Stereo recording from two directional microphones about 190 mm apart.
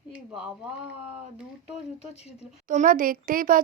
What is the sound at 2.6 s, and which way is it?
A child's voice, 40° right (ahead or behind).